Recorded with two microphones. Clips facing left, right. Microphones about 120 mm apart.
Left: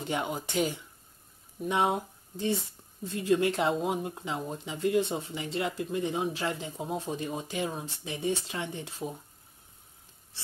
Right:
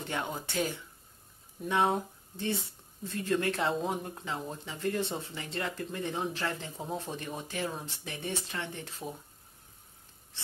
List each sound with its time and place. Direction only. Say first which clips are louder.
0.0 s speech: left 3 dB; 15° left (ahead or behind)